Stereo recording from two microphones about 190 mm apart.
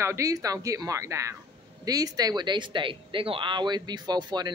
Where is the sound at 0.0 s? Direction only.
15° right (ahead or behind).